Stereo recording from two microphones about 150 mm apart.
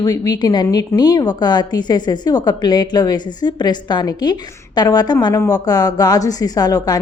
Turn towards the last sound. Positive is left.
turn(degrees=25)  # may be behind; listen again after turning